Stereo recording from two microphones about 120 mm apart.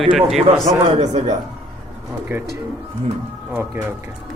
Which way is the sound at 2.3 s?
20° right (ahead or behind).